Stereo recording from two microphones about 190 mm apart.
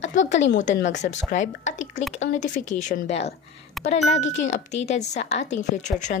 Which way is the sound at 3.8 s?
Centre (ahead or behind).